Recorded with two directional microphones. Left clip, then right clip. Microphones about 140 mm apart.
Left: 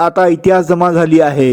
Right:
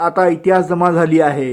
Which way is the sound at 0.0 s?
45° left (ahead or behind).